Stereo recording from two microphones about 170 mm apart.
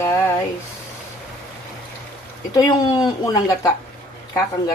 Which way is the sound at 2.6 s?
25° left (ahead or behind).